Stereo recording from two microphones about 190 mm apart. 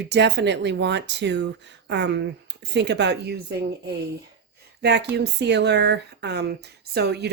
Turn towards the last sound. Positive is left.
turn(degrees=-60)  # may be behind; listen again after turning